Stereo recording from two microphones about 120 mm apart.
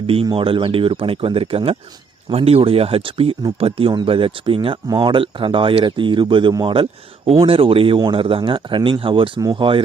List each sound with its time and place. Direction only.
0.3 s speech: 50° right (ahead or behind)
7.3 s speech: 50° right (ahead or behind)